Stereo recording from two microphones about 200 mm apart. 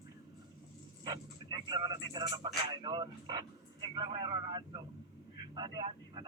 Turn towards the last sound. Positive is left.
turn(degrees=-20)  # may be behind; listen again after turning